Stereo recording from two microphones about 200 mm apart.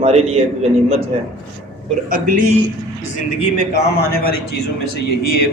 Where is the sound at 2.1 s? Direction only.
45° right (ahead or behind).